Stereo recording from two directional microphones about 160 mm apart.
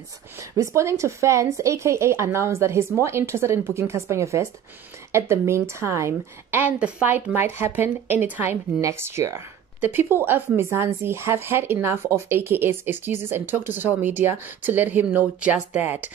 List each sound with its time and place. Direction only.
0.4 s speech: 20° right (ahead or behind)